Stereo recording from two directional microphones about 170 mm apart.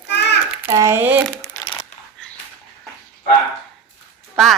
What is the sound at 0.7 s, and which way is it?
Speech, 20° right (ahead or behind).